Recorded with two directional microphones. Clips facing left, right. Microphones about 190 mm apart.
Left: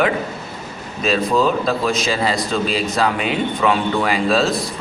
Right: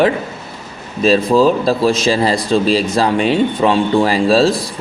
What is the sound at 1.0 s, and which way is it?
A man's voice, 35° right (ahead or behind).